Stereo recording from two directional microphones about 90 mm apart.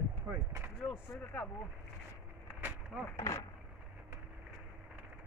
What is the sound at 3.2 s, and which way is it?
Wood, 35° left (ahead or behind).